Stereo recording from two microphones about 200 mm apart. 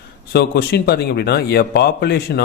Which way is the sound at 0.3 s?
55° left (ahead or behind).